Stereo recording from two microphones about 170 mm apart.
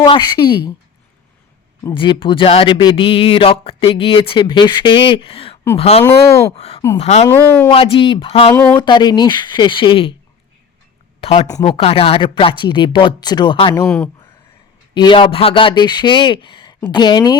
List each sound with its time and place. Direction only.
0.0 s speech: 25° left (ahead or behind)
1.9 s speech: 30° left (ahead or behind)
6.0 s speech: 15° left (ahead or behind)
6.6 s speech: 35° left (ahead or behind)
7.3 s speech: 15° left (ahead or behind)
7.7 s speech: 30° left (ahead or behind)
8.5 s speech: 10° left (ahead or behind)
8.8 s speech: 25° left (ahead or behind)
11.2 s speech: 35° left (ahead or behind)
13.8 s speech: 5° left (ahead or behind)
14.9 s speech: 30° left (ahead or behind)